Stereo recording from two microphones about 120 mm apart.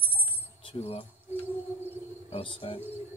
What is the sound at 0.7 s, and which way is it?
Speech, 50° left (ahead or behind).